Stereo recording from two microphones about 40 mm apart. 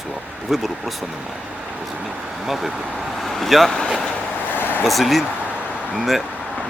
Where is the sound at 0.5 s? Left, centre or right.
Centre.